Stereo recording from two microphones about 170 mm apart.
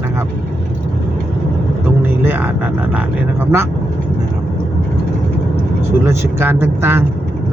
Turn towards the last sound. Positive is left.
turn(degrees=-15)  # may be behind; listen again after turning